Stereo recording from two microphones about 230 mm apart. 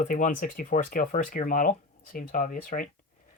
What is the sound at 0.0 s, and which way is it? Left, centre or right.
Speech, left.